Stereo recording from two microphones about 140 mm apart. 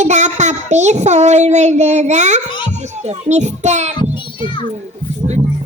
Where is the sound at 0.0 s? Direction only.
55° right (ahead or behind).